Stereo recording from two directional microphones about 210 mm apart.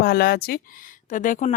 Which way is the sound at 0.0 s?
50° left (ahead or behind).